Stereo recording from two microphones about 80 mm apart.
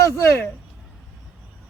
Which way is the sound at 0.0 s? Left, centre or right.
Left.